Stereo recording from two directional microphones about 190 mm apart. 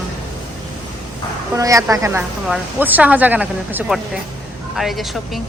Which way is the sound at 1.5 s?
15° right (ahead or behind).